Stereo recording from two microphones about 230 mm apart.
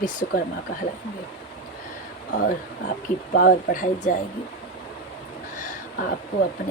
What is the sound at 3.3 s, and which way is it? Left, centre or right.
Speech, left.